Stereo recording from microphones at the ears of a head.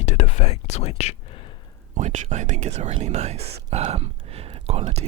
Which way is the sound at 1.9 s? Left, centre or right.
Right.